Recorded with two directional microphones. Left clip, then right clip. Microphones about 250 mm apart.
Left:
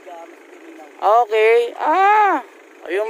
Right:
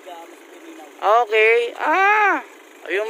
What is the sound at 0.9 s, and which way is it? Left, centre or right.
Speech, centre.